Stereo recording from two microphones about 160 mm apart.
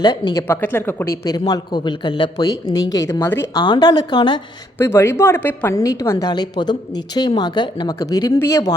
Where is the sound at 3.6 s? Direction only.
25° left (ahead or behind).